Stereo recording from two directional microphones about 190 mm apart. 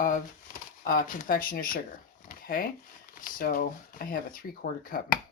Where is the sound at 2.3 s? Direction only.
50° left (ahead or behind).